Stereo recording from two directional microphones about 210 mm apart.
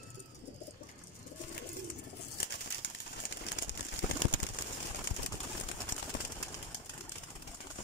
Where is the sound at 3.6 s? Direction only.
55° left (ahead or behind).